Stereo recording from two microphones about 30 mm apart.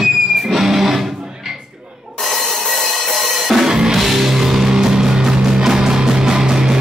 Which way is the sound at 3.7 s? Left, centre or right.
Right.